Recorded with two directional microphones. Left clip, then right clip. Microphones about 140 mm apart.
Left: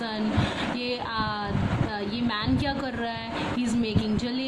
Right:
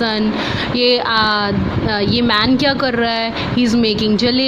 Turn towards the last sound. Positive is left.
turn(degrees=-50)  # may be behind; listen again after turning